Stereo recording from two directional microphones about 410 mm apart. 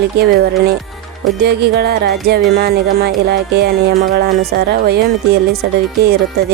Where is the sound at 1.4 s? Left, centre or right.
Right.